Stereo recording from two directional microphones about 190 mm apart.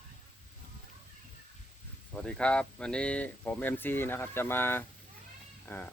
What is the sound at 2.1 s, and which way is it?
Speech, 5° left (ahead or behind).